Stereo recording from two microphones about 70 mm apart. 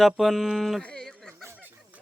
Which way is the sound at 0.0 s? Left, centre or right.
Centre.